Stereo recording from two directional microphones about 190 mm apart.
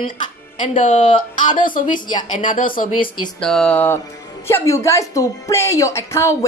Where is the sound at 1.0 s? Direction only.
25° left (ahead or behind).